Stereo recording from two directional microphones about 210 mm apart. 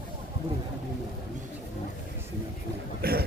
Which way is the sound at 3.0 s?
45° right (ahead or behind).